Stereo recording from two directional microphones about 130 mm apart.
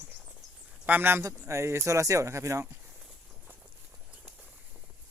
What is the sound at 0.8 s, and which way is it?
Speech, 15° right (ahead or behind).